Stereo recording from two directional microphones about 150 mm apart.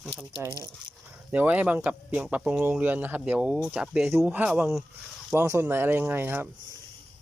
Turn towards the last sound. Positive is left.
turn(degrees=-15)  # may be behind; listen again after turning